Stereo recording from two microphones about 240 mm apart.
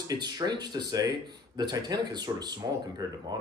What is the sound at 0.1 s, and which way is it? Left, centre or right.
Speech, centre.